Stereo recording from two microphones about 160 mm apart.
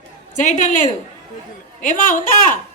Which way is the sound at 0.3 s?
50° left (ahead or behind).